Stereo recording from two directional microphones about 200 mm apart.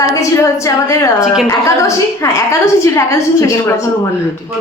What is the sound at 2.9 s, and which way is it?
Speech, 15° left (ahead or behind).